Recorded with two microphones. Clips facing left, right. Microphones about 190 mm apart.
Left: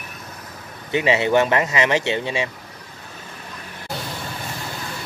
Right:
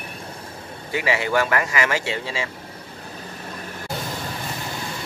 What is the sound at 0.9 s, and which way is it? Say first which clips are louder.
Speech: left 4 dB; 20° left (ahead or behind).